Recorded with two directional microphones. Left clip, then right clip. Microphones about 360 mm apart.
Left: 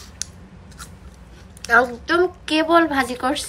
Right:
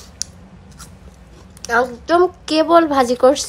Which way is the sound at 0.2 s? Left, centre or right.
Centre.